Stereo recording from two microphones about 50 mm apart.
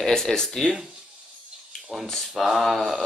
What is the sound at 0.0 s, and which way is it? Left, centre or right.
Speech, centre.